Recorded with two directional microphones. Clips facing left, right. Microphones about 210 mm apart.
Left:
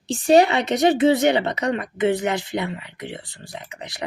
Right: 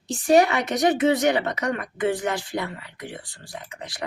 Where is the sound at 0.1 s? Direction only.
25° left (ahead or behind).